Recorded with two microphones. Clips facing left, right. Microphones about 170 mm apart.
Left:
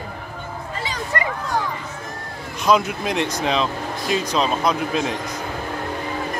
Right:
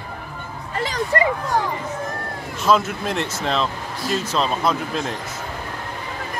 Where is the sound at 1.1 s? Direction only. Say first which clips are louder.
Right 5 dB; 30° right (ahead or behind).